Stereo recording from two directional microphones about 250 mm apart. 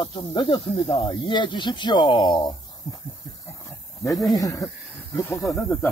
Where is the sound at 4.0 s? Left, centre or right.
Centre.